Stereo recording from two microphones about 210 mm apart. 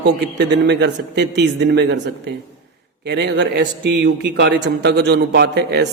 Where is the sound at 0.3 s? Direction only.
55° right (ahead or behind).